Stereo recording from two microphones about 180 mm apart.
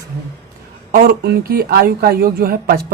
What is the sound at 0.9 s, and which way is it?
Speech, 60° right (ahead or behind).